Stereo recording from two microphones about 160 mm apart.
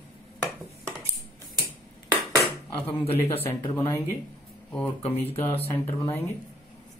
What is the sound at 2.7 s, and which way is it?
Speech, 35° left (ahead or behind).